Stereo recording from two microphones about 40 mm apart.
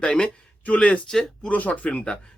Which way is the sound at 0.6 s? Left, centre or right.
Left.